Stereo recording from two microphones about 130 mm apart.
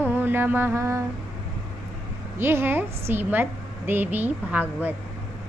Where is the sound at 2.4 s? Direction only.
20° right (ahead or behind).